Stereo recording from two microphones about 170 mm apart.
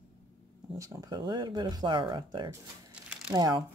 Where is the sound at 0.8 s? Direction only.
20° right (ahead or behind).